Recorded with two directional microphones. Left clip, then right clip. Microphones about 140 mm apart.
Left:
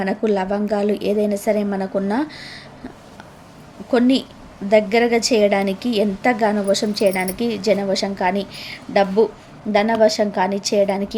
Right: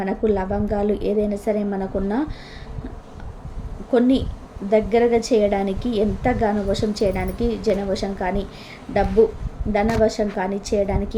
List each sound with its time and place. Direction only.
0.0 s a woman's voice: 20° left (ahead or behind)
3.9 s a woman's voice: 20° left (ahead or behind)